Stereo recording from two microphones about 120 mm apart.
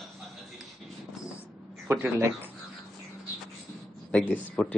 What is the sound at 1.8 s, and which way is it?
Speech, 20° right (ahead or behind).